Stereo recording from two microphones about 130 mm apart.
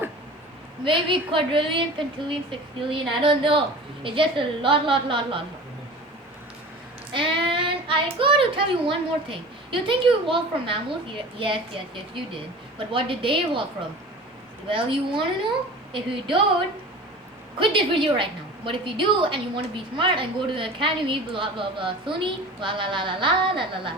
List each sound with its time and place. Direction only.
0.9 s a woman's voice: 40° right (ahead or behind)
7.1 s a woman's voice: 40° right (ahead or behind)
14.7 s a woman's voice: 40° right (ahead or behind)
17.6 s a woman's voice: 40° right (ahead or behind)